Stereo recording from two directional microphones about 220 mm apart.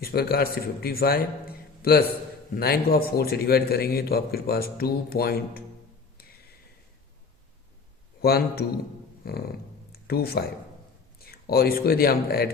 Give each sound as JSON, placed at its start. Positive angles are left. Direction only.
{"t": 0.0, "sound": "a man's voice", "side_deg": 45}
{"t": 8.2, "sound": "a man's voice", "side_deg": 45}